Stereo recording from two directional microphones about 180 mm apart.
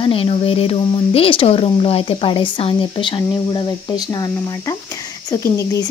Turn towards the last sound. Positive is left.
turn(degrees=20)  # may be behind; listen again after turning